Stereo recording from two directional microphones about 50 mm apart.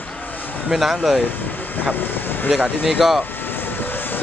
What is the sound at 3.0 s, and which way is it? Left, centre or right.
Speech, centre.